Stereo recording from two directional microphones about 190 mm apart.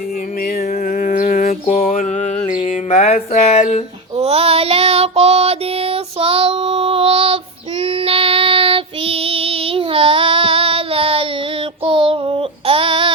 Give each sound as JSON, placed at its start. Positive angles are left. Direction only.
{"t": 0.9, "sound": "mantra", "side_deg": 45}
{"t": 2.5, "sound": "speech", "side_deg": 40}
{"t": 4.2, "sound": "child singing", "side_deg": -30}